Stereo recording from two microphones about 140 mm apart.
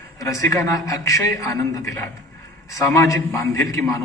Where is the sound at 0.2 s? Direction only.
25° left (ahead or behind).